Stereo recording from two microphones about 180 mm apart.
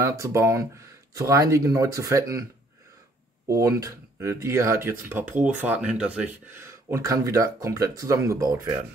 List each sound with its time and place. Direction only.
0.0 s speech: 15° right (ahead or behind)
3.4 s speech: 15° right (ahead or behind)